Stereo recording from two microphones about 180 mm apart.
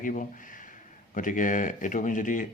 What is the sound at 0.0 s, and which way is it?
Speech, 45° left (ahead or behind).